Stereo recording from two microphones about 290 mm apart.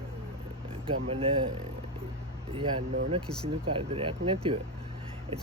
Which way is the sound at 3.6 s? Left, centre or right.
Centre.